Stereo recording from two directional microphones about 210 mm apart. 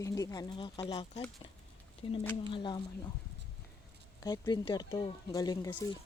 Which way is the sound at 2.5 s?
25° left (ahead or behind).